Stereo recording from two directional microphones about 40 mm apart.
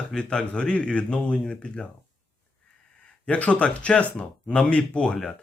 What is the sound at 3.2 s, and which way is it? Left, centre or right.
Speech, left.